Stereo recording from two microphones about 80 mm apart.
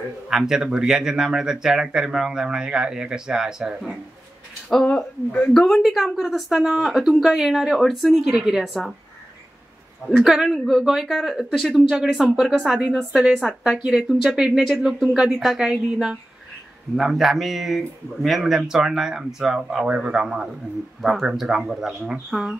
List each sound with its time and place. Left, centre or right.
0.3 s speech: centre
4.8 s speech: centre
5.5 s speech: centre
10.1 s speech: centre